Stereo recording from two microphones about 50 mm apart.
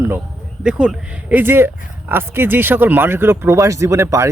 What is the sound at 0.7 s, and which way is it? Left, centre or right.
Speech, centre.